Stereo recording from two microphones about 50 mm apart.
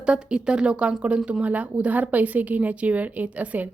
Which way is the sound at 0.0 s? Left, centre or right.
Centre.